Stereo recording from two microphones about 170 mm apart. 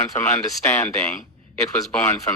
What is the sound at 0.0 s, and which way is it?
Speech, 20° left (ahead or behind).